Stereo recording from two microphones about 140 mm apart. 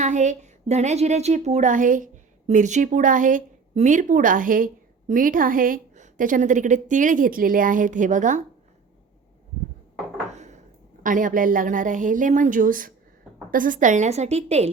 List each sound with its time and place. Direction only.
0.0 s a woman's voice: 60° right (ahead or behind)
10.3 s a sound: 55° right (ahead or behind)
11.0 s a woman's voice: 70° right (ahead or behind); by 14.7 s 50° right (ahead or behind)